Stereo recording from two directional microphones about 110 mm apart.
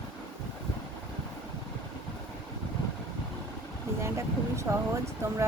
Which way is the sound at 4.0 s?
25° right (ahead or behind).